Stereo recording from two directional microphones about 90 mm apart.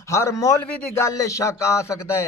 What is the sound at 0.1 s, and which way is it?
Speech, 35° left (ahead or behind).